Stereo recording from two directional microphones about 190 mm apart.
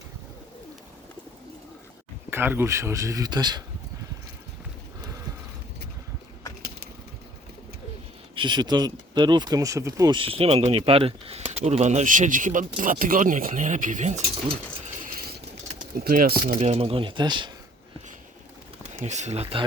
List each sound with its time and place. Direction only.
2.3 s speech: 10° right (ahead or behind)
8.4 s speech: 25° right (ahead or behind); by 14.5 s 40° right (ahead or behind)
16.0 s speech: 50° right (ahead or behind)
16.6 s speech: 35° right (ahead or behind)
19.0 s speech: 35° right (ahead or behind)